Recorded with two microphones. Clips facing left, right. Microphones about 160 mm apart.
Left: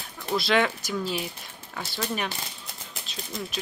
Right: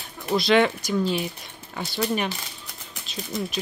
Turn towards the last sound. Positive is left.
turn(degrees=0)  # may be behind; listen again after turning